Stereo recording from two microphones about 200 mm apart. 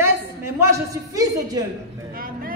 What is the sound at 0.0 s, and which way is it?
A woman's voice, 15° right (ahead or behind).